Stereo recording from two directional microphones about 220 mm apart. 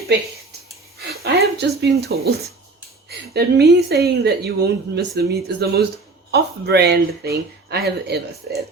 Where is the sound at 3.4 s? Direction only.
50° right (ahead or behind).